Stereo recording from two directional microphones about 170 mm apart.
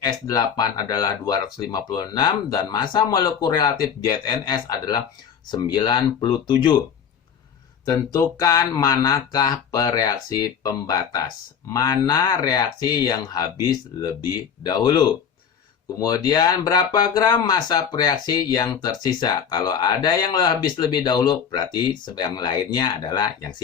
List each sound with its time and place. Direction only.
0.0 s speech: 25° left (ahead or behind)
7.9 s speech: 20° left (ahead or behind)